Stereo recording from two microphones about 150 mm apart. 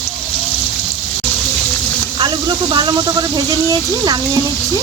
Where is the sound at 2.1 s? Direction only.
30° right (ahead or behind).